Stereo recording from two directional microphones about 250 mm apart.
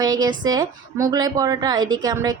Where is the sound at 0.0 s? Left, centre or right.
Centre.